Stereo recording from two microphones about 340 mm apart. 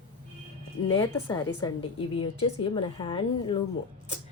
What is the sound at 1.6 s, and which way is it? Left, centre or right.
A woman's voice, centre.